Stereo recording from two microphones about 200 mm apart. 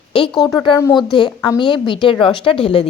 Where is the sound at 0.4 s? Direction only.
20° left (ahead or behind).